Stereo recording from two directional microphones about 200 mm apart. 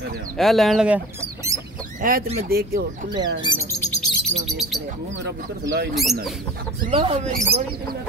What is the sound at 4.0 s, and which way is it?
Bird, centre (ahead or behind).